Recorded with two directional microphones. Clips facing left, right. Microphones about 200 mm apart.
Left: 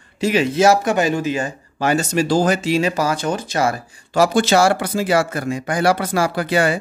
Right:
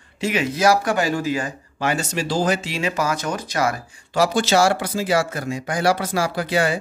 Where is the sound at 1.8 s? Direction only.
40° left (ahead or behind).